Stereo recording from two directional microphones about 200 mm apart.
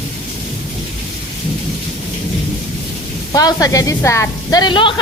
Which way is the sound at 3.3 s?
15° left (ahead or behind).